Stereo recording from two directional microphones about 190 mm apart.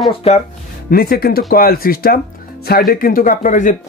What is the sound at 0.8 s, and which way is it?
Speech, 50° left (ahead or behind).